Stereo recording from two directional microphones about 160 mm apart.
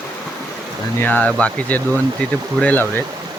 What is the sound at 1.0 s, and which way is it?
Speech, 10° left (ahead or behind).